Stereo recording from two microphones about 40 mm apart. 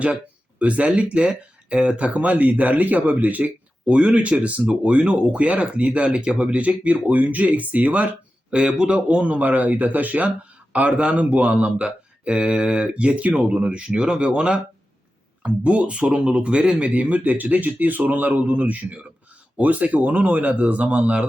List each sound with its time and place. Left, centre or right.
0.6 s speech: right
1.1 s speech: right
3.9 s speech: right
8.4 s speech: right
11.8 s speech: right
16.9 s speech: right